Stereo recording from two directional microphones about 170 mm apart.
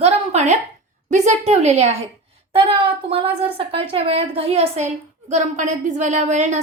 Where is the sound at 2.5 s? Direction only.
35° right (ahead or behind).